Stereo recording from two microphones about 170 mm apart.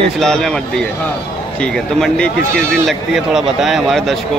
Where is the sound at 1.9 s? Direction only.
5° left (ahead or behind).